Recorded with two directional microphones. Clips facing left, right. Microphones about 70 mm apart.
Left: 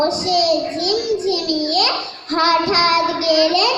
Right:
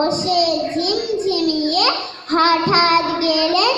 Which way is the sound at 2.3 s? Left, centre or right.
Right.